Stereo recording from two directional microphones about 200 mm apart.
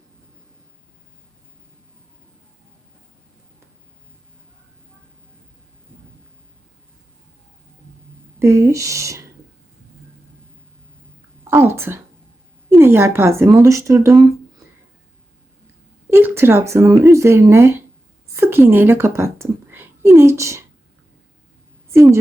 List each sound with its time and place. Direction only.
8.4 s speech: 15° right (ahead or behind)
11.5 s speech: 10° right (ahead or behind)
16.0 s a woman's voice: 10° right (ahead or behind)